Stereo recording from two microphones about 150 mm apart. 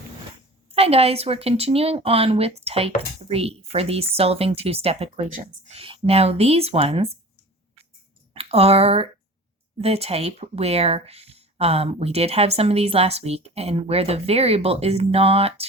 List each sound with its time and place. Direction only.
0.7 s speech: 40° right (ahead or behind)
8.3 s speech: 40° right (ahead or behind)